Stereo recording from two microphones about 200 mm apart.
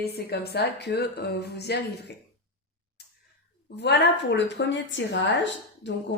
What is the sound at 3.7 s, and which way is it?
A woman's voice, 60° left (ahead or behind).